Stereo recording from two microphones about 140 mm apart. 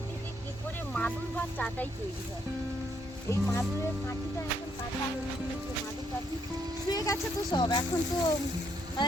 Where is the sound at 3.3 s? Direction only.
20° left (ahead or behind).